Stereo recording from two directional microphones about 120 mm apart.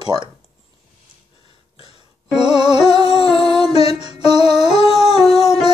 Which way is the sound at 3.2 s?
50° left (ahead or behind).